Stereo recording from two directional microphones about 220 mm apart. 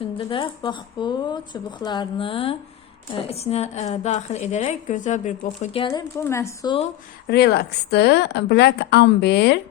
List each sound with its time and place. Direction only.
0.0 s a woman's voice: 25° left (ahead or behind)
7.3 s a woman's voice: 50° left (ahead or behind)